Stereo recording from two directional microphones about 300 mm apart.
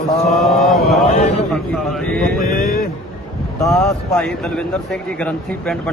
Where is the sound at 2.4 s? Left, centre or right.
Left.